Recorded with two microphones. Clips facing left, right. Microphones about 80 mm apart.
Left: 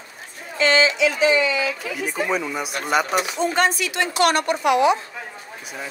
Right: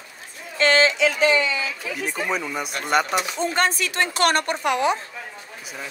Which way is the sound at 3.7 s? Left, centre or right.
Right.